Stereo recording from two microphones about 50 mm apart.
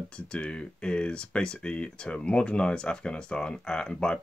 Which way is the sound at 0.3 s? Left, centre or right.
Left.